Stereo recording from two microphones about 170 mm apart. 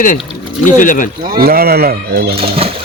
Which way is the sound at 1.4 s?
65° right (ahead or behind).